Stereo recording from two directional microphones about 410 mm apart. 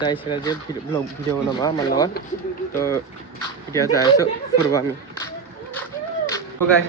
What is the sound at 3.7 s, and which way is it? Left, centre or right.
Speech, centre.